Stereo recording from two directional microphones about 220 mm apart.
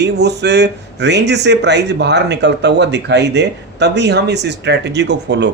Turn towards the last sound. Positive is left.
turn(degrees=-50)  # may be behind; listen again after turning